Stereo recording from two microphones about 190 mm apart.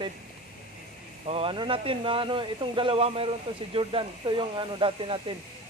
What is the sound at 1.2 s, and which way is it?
Speech, 30° right (ahead or behind).